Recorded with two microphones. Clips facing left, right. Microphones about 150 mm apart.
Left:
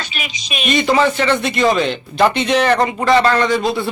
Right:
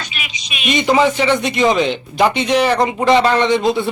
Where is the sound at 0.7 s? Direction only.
15° right (ahead or behind).